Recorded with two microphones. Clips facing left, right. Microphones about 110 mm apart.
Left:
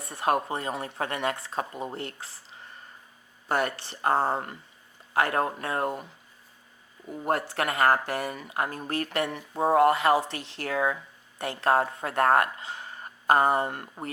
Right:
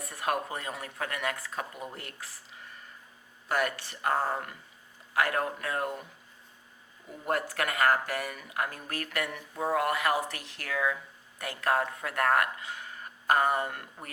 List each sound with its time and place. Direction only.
0.0 s speech: 30° left (ahead or behind)
7.3 s speech: 30° left (ahead or behind)